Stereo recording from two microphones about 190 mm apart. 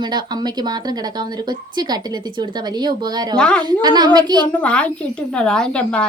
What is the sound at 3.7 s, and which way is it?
Speech, 20° right (ahead or behind).